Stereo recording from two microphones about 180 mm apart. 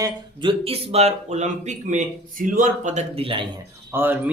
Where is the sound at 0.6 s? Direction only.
35° right (ahead or behind).